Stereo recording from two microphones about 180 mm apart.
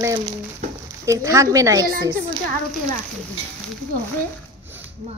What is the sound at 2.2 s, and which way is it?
Speech, 50° right (ahead or behind).